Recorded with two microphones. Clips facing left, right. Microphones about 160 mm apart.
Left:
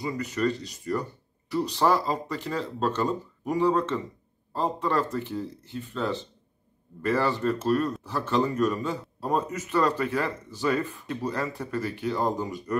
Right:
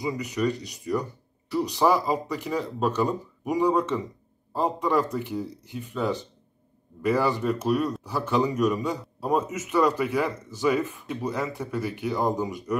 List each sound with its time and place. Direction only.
0.0 s speech: 10° right (ahead or behind)